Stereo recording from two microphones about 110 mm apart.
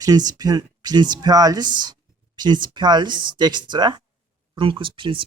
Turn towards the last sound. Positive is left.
turn(degrees=-50)  # may be behind; listen again after turning